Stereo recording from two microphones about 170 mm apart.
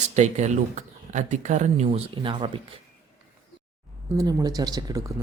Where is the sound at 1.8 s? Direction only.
30° right (ahead or behind).